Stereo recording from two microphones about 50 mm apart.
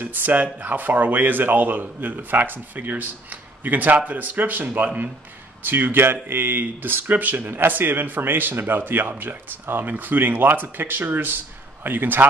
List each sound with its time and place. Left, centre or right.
0.0 s speech: right